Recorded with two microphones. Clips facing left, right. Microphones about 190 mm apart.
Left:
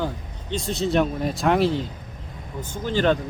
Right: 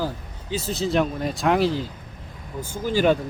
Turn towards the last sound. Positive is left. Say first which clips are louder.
# right 1 dB
turn(degrees=-10)  # may be behind; listen again after turning